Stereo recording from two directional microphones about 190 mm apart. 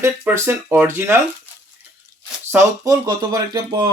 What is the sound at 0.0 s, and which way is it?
Speech, 10° right (ahead or behind).